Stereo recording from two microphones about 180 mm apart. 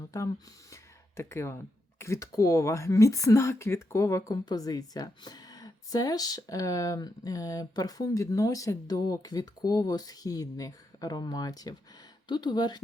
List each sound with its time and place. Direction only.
0.1 s speech: 15° left (ahead or behind)